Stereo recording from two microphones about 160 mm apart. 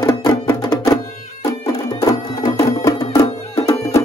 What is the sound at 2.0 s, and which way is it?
Music, 20° left (ahead or behind).